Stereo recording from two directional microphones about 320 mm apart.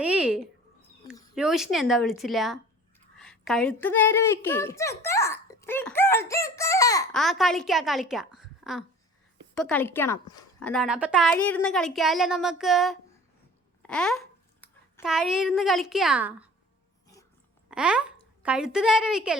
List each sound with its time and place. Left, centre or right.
0.0 s a sound: centre
1.4 s a woman's voice: centre
17.7 s a woman's voice: centre